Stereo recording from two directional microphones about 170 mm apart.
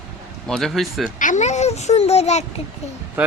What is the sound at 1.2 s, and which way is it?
A child's voice, 45° left (ahead or behind).